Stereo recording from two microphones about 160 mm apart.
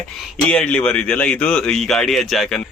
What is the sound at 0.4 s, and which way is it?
Speech, 10° left (ahead or behind).